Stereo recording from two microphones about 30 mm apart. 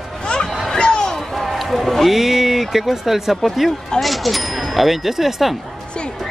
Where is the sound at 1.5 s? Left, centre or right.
Centre.